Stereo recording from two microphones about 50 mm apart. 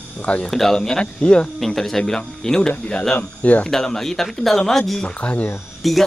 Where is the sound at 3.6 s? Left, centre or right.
Centre.